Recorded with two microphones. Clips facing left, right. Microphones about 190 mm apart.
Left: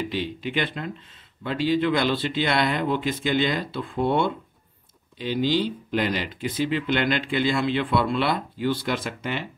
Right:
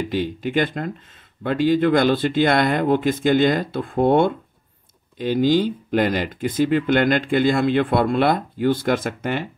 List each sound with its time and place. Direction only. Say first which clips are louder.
0.1 s speech: right 6 dB; 45° right (ahead or behind)